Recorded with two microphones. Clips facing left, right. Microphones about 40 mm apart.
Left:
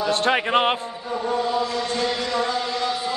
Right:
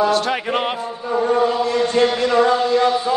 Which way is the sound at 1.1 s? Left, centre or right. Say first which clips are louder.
Right 6 dB; right.